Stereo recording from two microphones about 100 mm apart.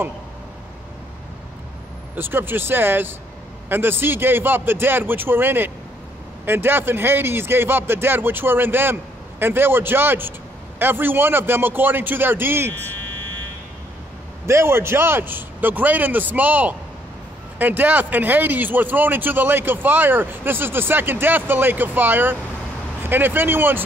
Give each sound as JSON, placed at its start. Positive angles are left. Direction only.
{"t": 2.1, "sound": "speech", "side_deg": -20}
{"t": 12.7, "sound": "speech", "side_deg": 20}
{"t": 14.4, "sound": "speech", "side_deg": -25}